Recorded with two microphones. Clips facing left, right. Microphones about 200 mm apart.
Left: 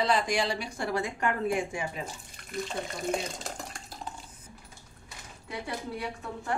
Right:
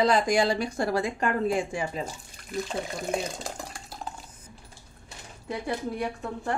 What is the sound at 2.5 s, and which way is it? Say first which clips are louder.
Speech: right 3 dB; centre (ahead or behind).